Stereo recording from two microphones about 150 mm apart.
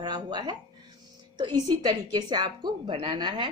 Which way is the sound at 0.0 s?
25° right (ahead or behind).